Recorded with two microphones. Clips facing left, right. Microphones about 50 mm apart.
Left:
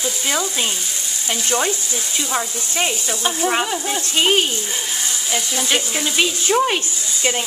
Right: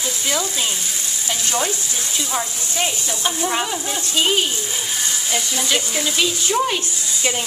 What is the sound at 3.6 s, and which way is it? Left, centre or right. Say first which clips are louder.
Speech: left 2 dB; centre.